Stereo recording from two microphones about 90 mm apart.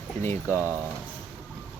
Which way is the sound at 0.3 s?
30° left (ahead or behind).